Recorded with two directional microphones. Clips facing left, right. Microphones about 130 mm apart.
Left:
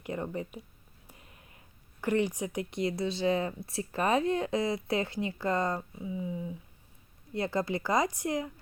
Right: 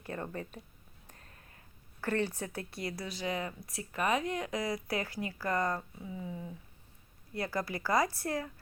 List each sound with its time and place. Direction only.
0.0 s speech: 15° left (ahead or behind)
1.0 s a sound: 15° left (ahead or behind); by 3.5 s 30° left (ahead or behind)
3.7 s speech: 30° left (ahead or behind)
7.3 s speech: 25° left (ahead or behind)